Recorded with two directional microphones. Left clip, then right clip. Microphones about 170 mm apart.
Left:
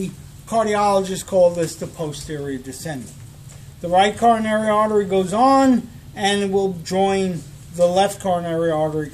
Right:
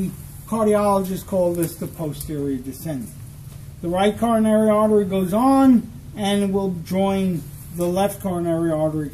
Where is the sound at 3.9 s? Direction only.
50° left (ahead or behind).